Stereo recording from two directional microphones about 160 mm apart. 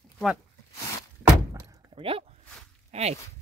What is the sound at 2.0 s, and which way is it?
Speech, 35° right (ahead or behind).